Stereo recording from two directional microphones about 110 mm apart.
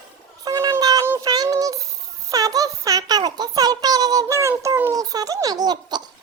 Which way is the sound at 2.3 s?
35° right (ahead or behind).